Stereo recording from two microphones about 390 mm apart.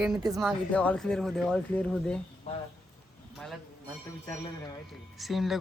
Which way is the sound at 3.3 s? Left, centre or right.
Centre.